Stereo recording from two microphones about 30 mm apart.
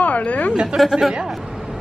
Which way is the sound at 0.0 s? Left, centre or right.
Left.